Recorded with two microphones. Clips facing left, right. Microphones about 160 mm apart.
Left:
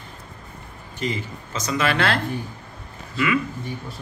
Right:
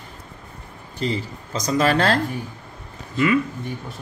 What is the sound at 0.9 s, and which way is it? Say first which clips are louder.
A man's voice: right 2 dB; 35° right (ahead or behind).